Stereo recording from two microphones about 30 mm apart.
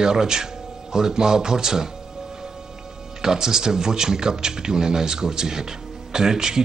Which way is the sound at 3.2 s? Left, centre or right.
Centre.